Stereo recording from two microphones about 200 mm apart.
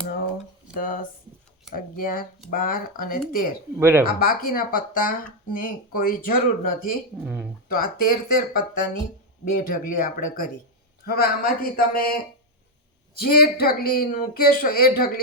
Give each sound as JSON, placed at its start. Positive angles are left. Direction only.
{"t": 0.7, "sound": "speech", "side_deg": 45}
{"t": 3.8, "sound": "speech", "side_deg": -10}
{"t": 4.0, "sound": "speech", "side_deg": 45}
{"t": 7.3, "sound": "speech", "side_deg": -5}
{"t": 7.7, "sound": "speech", "side_deg": 45}